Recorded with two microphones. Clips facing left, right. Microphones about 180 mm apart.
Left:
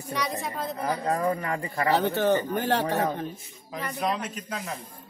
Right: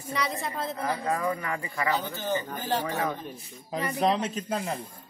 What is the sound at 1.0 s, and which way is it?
Speech, 35° left (ahead or behind).